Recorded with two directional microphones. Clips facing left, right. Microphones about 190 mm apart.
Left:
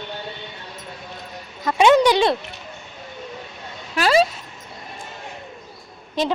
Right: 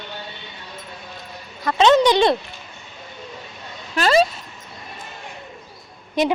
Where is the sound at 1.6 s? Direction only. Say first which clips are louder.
Even; 10° left (ahead or behind).